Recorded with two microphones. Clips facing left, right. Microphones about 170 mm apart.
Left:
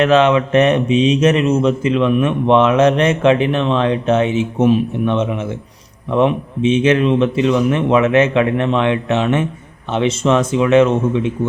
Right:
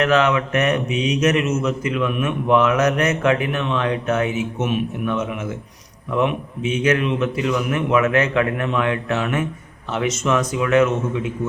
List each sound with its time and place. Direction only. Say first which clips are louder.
0.0 s speech: left 5 dB; 25° left (ahead or behind)